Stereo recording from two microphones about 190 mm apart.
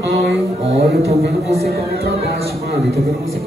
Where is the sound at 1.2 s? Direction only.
60° right (ahead or behind).